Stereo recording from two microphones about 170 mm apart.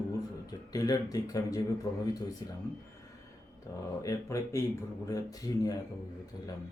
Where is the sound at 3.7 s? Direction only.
20° left (ahead or behind).